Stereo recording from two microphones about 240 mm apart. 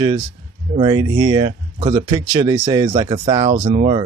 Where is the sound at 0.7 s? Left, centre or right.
Right.